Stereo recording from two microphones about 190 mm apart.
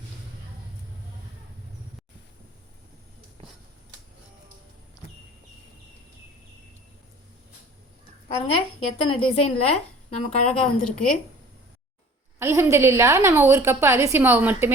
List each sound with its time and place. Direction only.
8.3 s a woman's voice: 30° left (ahead or behind)
10.5 s a woman's voice: 5° left (ahead or behind)
12.4 s a woman's voice: 15° right (ahead or behind)